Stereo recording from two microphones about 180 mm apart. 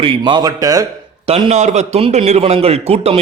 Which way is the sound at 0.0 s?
25° right (ahead or behind).